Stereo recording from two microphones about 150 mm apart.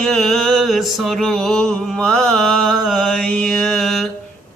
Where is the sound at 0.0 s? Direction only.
Centre (ahead or behind).